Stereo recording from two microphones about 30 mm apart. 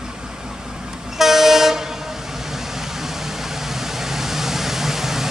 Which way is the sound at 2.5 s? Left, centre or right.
Centre.